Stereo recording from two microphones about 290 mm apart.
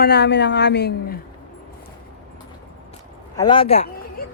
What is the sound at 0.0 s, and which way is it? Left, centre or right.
Speech, left.